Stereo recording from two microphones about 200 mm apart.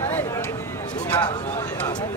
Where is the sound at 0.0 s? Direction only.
10° left (ahead or behind).